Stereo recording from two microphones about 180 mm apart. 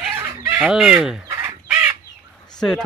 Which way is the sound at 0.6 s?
5° right (ahead or behind).